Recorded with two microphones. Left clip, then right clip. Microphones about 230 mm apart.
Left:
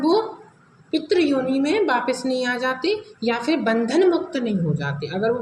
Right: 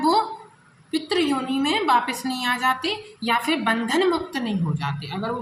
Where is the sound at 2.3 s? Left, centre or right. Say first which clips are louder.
Even; right.